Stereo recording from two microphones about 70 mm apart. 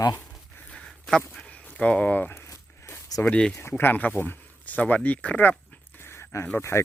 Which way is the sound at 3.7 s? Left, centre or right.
Left.